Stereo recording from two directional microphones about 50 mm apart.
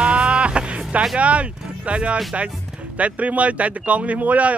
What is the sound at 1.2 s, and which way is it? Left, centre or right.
Speech, right.